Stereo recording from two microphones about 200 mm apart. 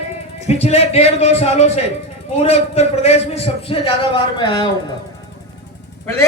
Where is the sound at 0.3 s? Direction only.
35° left (ahead or behind).